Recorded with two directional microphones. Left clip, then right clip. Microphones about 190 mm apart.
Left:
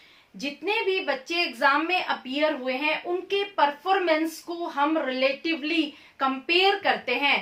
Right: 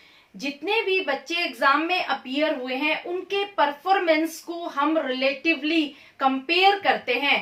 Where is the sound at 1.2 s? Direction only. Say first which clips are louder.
Even; 15° left (ahead or behind).